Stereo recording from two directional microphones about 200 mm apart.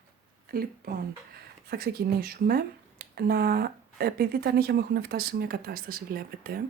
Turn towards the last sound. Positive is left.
turn(degrees=-45)  # may be behind; listen again after turning